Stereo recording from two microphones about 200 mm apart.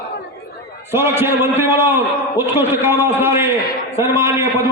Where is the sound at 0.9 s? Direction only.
10° right (ahead or behind).